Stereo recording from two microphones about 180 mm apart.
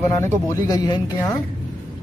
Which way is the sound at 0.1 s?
20° left (ahead or behind).